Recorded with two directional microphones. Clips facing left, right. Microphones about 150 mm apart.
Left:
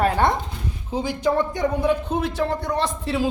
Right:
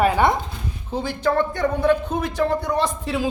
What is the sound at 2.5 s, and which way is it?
Speech, centre (ahead or behind).